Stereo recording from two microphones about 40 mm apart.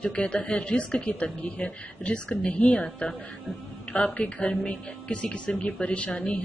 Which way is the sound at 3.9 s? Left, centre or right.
Left.